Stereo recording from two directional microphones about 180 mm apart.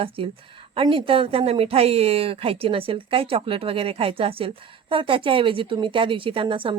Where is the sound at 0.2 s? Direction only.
30° right (ahead or behind).